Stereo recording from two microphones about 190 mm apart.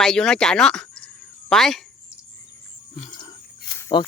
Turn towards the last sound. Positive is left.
turn(degrees=25)  # may be behind; listen again after turning